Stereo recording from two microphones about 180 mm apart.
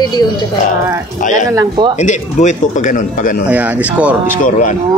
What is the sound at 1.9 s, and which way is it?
A man's voice, 40° left (ahead or behind).